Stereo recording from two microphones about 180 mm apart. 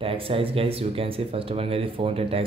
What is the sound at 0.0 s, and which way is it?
Speech, 30° right (ahead or behind).